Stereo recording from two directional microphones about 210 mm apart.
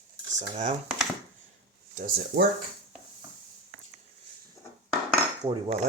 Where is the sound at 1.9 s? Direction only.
45° right (ahead or behind).